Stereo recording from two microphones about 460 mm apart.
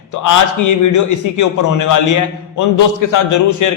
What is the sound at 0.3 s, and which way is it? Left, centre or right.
A man's voice, left.